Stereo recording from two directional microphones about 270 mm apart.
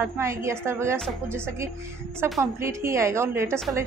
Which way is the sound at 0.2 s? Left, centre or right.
Centre.